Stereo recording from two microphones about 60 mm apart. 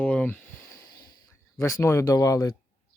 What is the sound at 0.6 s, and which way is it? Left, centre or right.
Snort, left.